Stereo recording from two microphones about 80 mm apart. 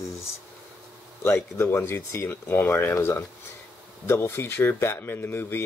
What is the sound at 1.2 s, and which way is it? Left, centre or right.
Speech, left.